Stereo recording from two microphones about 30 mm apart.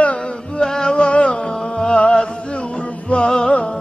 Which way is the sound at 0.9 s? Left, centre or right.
Left.